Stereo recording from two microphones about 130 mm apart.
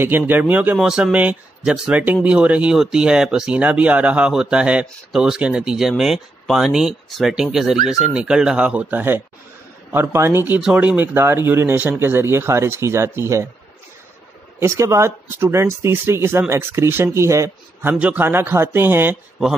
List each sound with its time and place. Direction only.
0.0 s speech: 15° right (ahead or behind)
14.6 s speech: 20° right (ahead or behind)
17.9 s speech: 10° right (ahead or behind)